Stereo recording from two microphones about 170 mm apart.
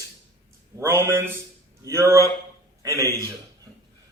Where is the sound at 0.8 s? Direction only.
15° right (ahead or behind).